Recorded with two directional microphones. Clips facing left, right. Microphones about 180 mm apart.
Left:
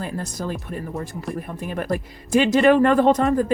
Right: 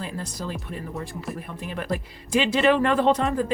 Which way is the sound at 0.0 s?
50° left (ahead or behind).